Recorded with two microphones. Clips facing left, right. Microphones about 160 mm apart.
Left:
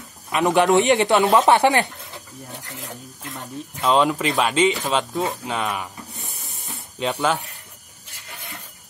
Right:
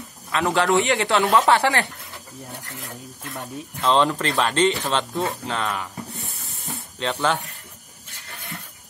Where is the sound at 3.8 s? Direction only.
10° left (ahead or behind).